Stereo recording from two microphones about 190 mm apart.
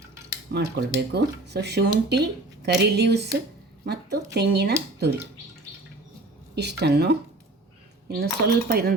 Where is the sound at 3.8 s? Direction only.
60° right (ahead or behind).